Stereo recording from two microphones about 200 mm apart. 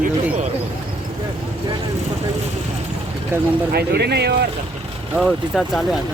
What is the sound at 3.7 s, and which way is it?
Speech, 55° right (ahead or behind).